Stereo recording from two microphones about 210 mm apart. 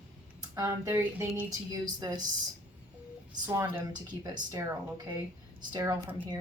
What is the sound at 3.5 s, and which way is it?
A woman's voice, 15° right (ahead or behind).